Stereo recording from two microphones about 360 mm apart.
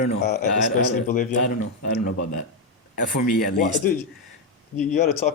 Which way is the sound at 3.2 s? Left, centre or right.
Left.